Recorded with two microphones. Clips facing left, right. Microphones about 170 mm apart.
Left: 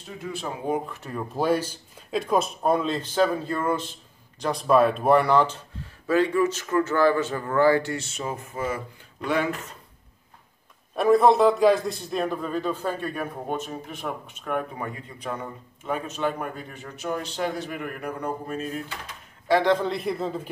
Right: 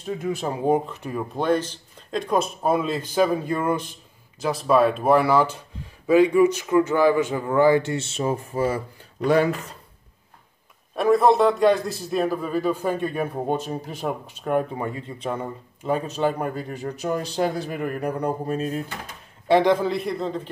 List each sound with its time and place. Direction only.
0.7 s a man's voice: 20° right (ahead or behind)
1.1 s speech: 5° left (ahead or behind); by 3.9 s 15° right (ahead or behind)
4.4 s speech: centre (ahead or behind); by 9.6 s 35° right (ahead or behind)
11.0 s a man's voice: centre (ahead or behind); by 18.7 s 35° right (ahead or behind)
19.4 s a man's voice: 20° right (ahead or behind)
19.7 s speech: 5° right (ahead or behind)